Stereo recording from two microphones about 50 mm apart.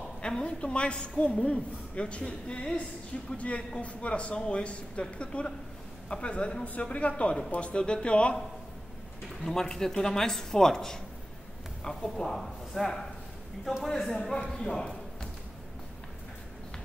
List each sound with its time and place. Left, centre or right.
0.2 s a man's voice: centre
9.4 s speech: centre